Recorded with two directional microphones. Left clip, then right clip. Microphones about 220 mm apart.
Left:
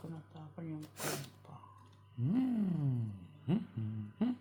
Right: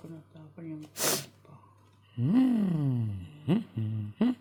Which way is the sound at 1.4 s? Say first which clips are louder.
Left 1 dB; 30° left (ahead or behind).